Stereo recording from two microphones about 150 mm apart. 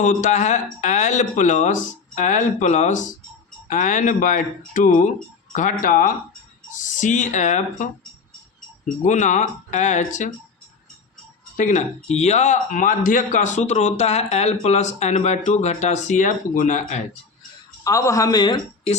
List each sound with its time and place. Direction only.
0.0 s speech: 55° left (ahead or behind)
9.0 s speech: 55° left (ahead or behind)
11.5 s speech: 55° left (ahead or behind)
17.8 s speech: 20° left (ahead or behind)